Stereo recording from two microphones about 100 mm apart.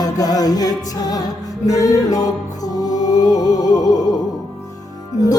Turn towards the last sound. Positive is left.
turn(degrees=40)  # may be behind; listen again after turning